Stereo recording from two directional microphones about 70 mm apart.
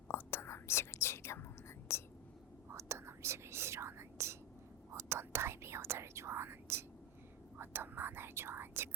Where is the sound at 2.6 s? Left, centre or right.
Right.